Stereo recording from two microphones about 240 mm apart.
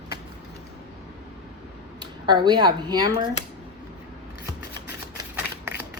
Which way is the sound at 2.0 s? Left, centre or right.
Centre.